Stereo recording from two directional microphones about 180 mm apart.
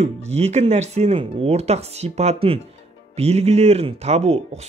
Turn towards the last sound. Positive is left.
turn(degrees=-35)  # may be behind; listen again after turning